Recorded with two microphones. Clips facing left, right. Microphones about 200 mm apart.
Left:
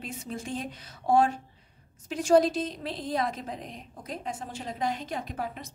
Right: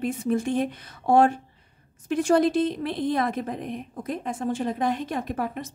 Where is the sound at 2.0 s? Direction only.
55° right (ahead or behind).